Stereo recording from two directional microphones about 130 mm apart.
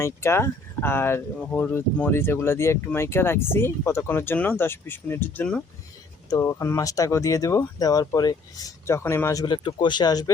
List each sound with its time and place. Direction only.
0.0 s speech: 20° left (ahead or behind)
6.3 s speech: 25° left (ahead or behind)